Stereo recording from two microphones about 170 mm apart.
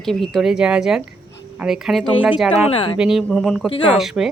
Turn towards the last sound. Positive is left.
turn(degrees=0)  # may be behind; listen again after turning